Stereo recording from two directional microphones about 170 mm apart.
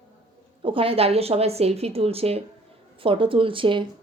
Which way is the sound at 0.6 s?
30° right (ahead or behind).